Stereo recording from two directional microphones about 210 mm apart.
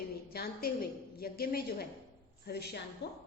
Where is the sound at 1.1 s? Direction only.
45° left (ahead or behind).